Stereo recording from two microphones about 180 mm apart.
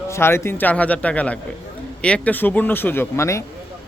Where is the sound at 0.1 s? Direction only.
15° left (ahead or behind).